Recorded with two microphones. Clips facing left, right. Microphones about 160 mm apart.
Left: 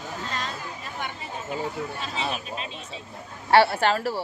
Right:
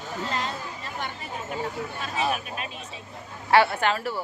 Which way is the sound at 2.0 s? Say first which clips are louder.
Right 3 dB; 25° left (ahead or behind).